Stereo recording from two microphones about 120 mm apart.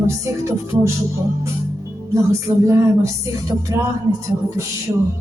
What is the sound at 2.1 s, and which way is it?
Speech, 25° right (ahead or behind).